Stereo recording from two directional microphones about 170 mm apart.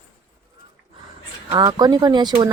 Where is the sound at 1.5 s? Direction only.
25° right (ahead or behind).